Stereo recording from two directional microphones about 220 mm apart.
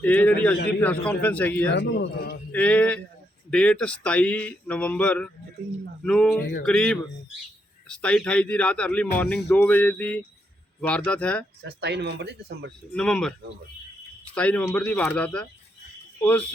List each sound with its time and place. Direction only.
0.0 s a man's voice: 5° left (ahead or behind)
1.7 s a man's voice: 50° left (ahead or behind)
2.5 s a man's voice: 5° left (ahead or behind)
11.6 s speech: 50° right (ahead or behind)
12.9 s a man's voice: 5° left (ahead or behind)
14.3 s speech: 5° left (ahead or behind)